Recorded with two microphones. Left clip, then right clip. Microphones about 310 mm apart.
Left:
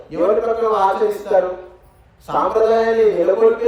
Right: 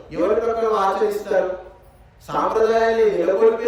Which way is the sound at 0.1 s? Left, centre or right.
Centre.